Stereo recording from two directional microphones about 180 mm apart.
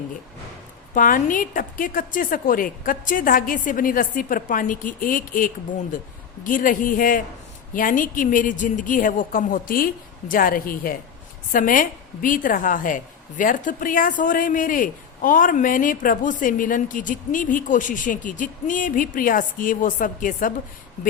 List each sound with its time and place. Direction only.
0.9 s a woman's voice: 50° left (ahead or behind)